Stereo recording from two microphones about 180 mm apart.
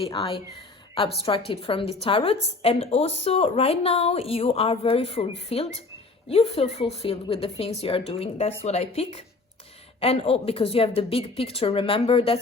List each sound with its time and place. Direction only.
0.0 s speech: 30° left (ahead or behind)
1.5 s a woman's voice: 30° left (ahead or behind)